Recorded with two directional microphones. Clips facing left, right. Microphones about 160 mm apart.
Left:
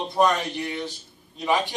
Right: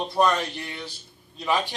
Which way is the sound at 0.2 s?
15° left (ahead or behind).